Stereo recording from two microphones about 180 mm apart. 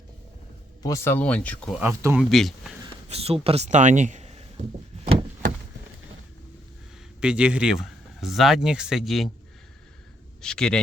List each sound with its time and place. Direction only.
0.8 s speech: 20° left (ahead or behind)
1.7 s speech: 10° right (ahead or behind)
2.3 s speech: centre (ahead or behind)
2.8 s speech: 35° right (ahead or behind)
7.2 s speech: 5° right (ahead or behind)
10.4 s speech: 5° left (ahead or behind)